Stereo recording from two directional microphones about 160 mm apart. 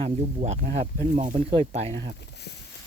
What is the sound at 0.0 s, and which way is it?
Speech, 45° right (ahead or behind).